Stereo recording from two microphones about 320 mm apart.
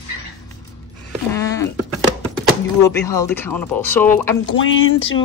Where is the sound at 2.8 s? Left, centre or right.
Centre.